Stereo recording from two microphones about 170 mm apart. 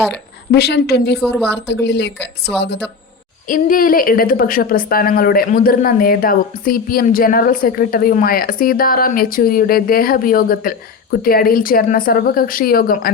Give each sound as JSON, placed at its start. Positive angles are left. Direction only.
{"t": 0.5, "sound": "a woman's voice", "side_deg": 75}
{"t": 1.5, "sound": "speech", "side_deg": 90}
{"t": 3.5, "sound": "a woman's voice", "side_deg": 55}